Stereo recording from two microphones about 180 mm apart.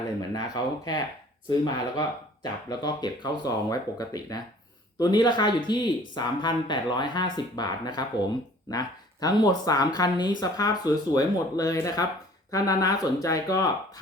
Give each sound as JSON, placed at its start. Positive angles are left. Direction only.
{"t": 0.2, "sound": "speech", "side_deg": 20}